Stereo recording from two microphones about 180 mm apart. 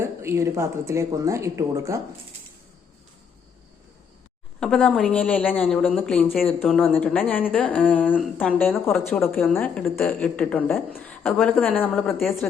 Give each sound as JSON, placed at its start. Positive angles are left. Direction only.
{"t": 0.0, "sound": "speech", "side_deg": -15}
{"t": 4.6, "sound": "speech", "side_deg": 5}